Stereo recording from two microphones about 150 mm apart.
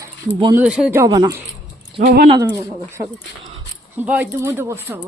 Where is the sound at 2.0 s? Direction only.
90° right.